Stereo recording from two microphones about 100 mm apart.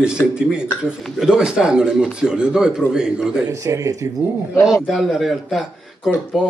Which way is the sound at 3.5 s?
35° right (ahead or behind).